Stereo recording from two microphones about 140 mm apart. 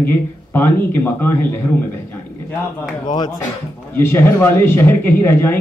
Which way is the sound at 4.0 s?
15° left (ahead or behind).